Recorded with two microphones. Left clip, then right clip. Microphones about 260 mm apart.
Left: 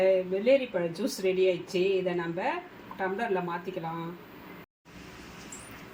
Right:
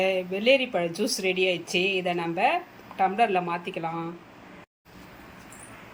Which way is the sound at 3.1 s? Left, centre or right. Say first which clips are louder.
Right 4 dB; right.